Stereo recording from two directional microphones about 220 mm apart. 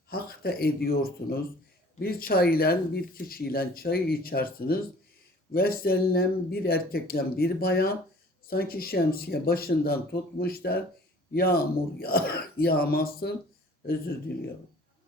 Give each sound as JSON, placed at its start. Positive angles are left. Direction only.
{"t": 0.1, "sound": "speech", "side_deg": 45}